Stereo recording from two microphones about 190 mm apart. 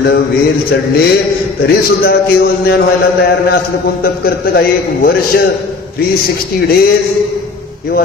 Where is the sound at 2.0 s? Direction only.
55° left (ahead or behind).